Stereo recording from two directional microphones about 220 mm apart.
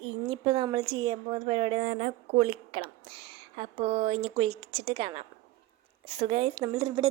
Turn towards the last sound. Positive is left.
turn(degrees=-25)  # may be behind; listen again after turning